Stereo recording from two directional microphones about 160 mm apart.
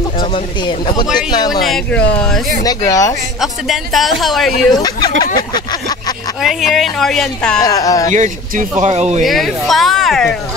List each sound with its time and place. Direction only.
0.2 s speech: 30° left (ahead or behind)
1.6 s speech: 5° left (ahead or behind)
2.6 s speech: 20° left (ahead or behind)
3.3 s speech: centre (ahead or behind)
4.7 s speech: 25° left (ahead or behind)
6.4 s speech: centre (ahead or behind)
7.6 s speech: 20° left (ahead or behind)
8.1 s speech: 50° right (ahead or behind)
9.2 s speech: centre (ahead or behind)